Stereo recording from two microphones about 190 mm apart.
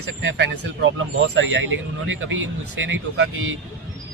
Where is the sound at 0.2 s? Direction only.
85° right.